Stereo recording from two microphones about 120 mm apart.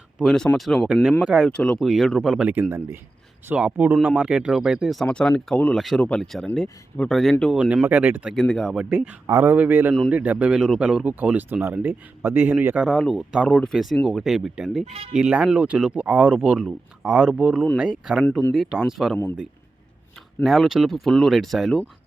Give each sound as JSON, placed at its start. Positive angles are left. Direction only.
{"t": 0.2, "sound": "speech", "side_deg": 5}
{"t": 1.5, "sound": "speech", "side_deg": 10}
{"t": 2.6, "sound": "speech", "side_deg": -20}
{"t": 7.5, "sound": "speech", "side_deg": -5}
{"t": 8.4, "sound": "speech", "side_deg": 5}
{"t": 8.9, "sound": "speech", "side_deg": -10}
{"t": 9.2, "sound": "speech", "side_deg": -20}
{"t": 12.8, "sound": "speech", "side_deg": 0}
{"t": 20.4, "sound": "speech", "side_deg": 0}